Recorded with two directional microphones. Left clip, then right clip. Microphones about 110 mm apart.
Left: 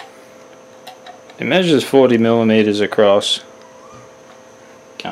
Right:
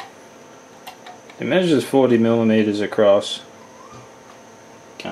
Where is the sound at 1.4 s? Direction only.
40° left (ahead or behind).